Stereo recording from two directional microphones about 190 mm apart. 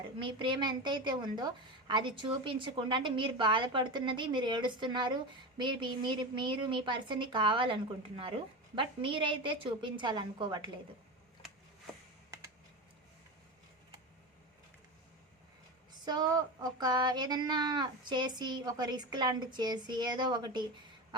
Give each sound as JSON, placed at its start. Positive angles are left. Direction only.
{"t": 0.2, "sound": "a woman's voice", "side_deg": -25}
{"t": 16.0, "sound": "a woman's voice", "side_deg": -20}